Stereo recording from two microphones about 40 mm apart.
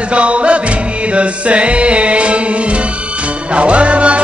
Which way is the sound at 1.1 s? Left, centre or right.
Right.